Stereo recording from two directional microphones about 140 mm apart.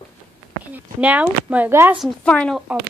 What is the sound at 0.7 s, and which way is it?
Speech, 10° right (ahead or behind).